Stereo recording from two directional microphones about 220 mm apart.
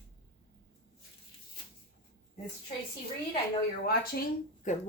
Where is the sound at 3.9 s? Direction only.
45° left (ahead or behind).